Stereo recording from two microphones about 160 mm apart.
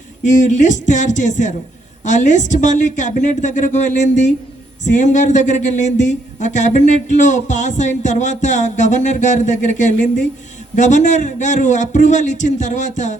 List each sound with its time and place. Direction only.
0.3 s speech: 50° left (ahead or behind)